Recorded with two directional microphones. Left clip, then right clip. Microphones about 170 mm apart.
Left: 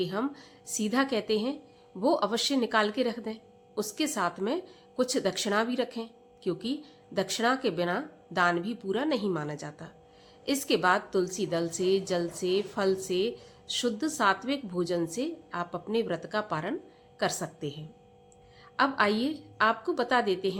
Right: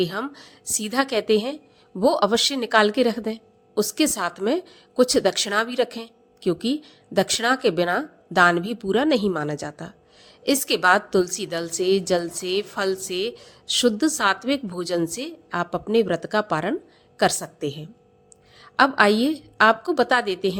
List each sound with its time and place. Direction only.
0.0 s a woman's voice: 45° right (ahead or behind)